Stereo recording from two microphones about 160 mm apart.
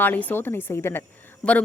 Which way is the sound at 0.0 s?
10° left (ahead or behind).